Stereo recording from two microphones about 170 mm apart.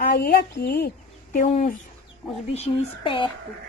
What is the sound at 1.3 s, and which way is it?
Speech, 45° left (ahead or behind).